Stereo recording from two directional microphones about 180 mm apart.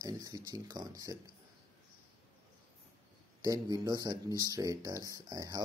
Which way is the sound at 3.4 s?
20° right (ahead or behind).